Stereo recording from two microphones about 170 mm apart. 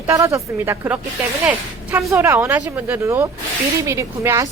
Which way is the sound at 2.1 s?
10° right (ahead or behind).